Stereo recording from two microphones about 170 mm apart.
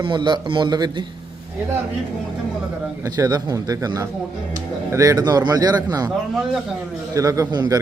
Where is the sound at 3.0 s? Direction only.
20° right (ahead or behind).